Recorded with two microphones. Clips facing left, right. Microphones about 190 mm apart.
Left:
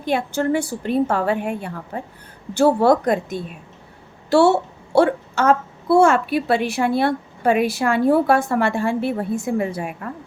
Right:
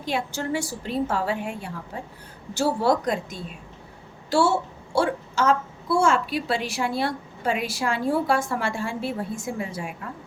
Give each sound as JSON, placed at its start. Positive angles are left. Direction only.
{"t": 0.0, "sound": "a woman's voice", "side_deg": 55}